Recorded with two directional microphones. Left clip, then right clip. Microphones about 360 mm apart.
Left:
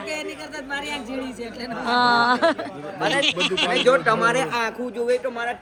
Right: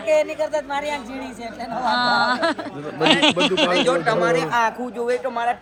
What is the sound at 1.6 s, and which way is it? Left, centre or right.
Speech, centre.